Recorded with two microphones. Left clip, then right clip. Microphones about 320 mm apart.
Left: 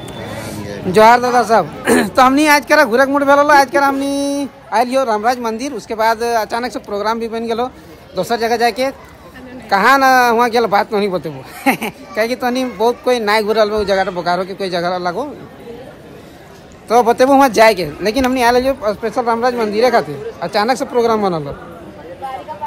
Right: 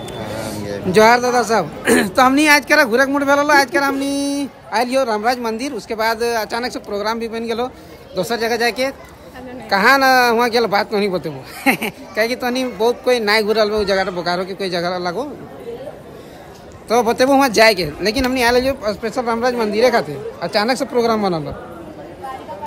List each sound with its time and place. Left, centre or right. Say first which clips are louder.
0.9 s speech: left 3 dB; centre
16.9 s speech: left 4 dB; centre